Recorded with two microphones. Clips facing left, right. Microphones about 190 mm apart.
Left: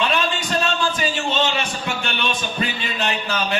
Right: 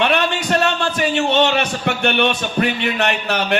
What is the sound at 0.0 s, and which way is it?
A man's voice, 65° right (ahead or behind).